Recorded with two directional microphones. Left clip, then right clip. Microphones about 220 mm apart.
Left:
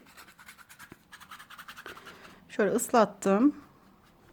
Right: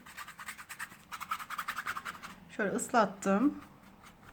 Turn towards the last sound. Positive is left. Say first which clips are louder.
# left 4 dB
turn(degrees=40)  # may be behind; listen again after turning